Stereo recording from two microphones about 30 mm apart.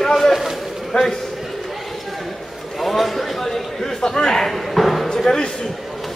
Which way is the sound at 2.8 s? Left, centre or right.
Centre.